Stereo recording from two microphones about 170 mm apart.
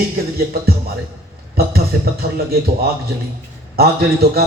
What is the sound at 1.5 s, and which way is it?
Speech, 65° right (ahead or behind).